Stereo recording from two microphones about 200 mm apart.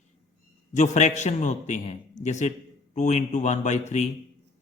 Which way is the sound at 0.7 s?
35° left (ahead or behind).